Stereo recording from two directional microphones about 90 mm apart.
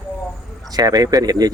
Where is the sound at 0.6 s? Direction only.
45° right (ahead or behind).